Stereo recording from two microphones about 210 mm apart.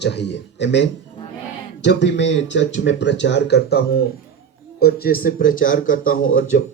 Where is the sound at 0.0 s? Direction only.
55° left (ahead or behind).